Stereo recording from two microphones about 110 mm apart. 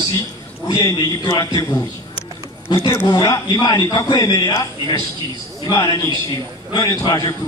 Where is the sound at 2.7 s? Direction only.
40° left (ahead or behind).